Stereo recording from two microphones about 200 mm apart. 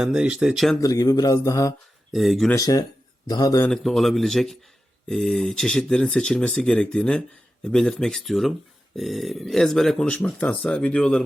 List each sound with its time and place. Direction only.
0.0 s a man's voice: 5° right (ahead or behind)
0.8 s speech: 15° left (ahead or behind)
2.1 s a man's voice: centre (ahead or behind)
2.6 s speech: 15° left (ahead or behind)
3.7 s a man's voice: centre (ahead or behind)